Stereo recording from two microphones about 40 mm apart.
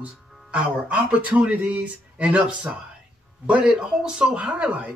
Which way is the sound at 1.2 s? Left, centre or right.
Right.